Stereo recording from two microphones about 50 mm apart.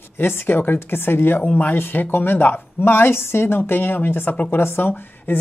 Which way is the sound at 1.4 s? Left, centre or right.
Left.